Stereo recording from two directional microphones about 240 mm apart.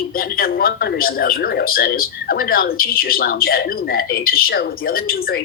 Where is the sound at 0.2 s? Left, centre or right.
Left.